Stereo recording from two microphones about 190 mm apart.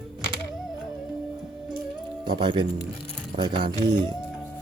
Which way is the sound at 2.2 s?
25° right (ahead or behind).